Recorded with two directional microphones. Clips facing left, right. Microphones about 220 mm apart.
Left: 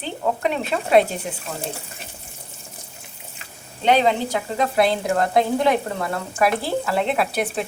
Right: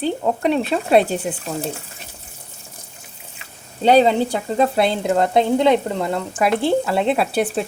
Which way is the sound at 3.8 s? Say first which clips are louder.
Right 4 dB; 35° right (ahead or behind).